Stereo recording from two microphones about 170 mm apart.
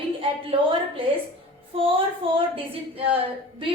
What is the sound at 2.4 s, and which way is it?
Speech, 35° right (ahead or behind).